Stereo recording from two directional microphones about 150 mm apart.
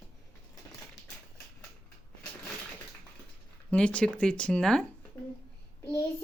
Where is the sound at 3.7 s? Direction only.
5° left (ahead or behind).